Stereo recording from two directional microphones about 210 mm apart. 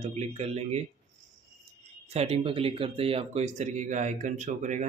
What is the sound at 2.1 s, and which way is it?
Speech, 30° right (ahead or behind).